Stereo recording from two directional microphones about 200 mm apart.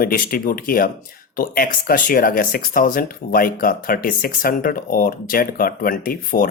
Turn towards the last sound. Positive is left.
turn(degrees=45)  # may be behind; listen again after turning